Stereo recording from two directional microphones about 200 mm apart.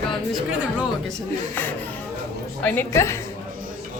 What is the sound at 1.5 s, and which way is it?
A woman's voice, 10° left (ahead or behind).